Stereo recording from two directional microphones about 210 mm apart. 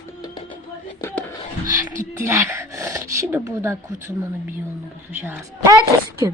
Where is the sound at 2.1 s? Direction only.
15° right (ahead or behind).